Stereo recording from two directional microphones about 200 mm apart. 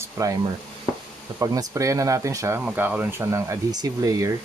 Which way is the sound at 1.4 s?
15° right (ahead or behind).